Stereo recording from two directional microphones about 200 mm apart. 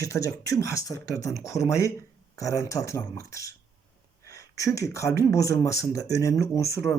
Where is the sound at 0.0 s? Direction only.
15° left (ahead or behind).